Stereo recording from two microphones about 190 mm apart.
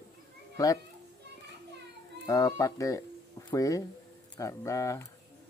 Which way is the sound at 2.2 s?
20° left (ahead or behind).